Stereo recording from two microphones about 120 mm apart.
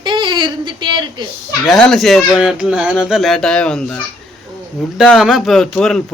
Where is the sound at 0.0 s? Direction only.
40° right (ahead or behind).